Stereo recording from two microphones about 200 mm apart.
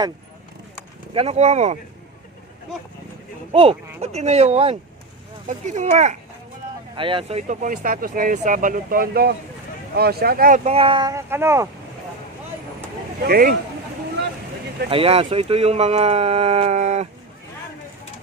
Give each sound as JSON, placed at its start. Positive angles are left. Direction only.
{"t": 1.1, "sound": "speech", "side_deg": -30}
{"t": 3.5, "sound": "speech", "side_deg": -30}
{"t": 6.9, "sound": "speech", "side_deg": -25}
{"t": 10.6, "sound": "speech", "side_deg": -30}
{"t": 13.2, "sound": "speech", "side_deg": -50}
{"t": 14.8, "sound": "speech", "side_deg": -30}